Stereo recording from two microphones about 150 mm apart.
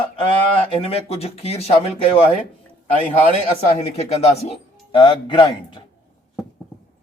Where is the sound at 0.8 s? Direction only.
45° left (ahead or behind).